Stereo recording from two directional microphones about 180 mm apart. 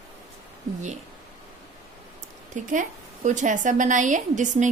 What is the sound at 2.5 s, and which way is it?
A woman's voice, 45° right (ahead or behind).